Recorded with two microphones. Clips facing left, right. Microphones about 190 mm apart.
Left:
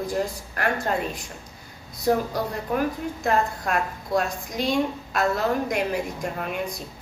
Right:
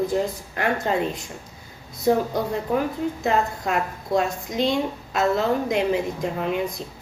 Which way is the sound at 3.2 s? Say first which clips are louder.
Left 1 dB; 25° right (ahead or behind).